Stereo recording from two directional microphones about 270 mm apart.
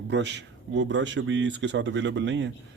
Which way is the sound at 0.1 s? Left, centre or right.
Right.